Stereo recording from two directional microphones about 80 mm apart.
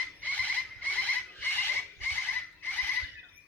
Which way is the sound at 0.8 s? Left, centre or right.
Centre.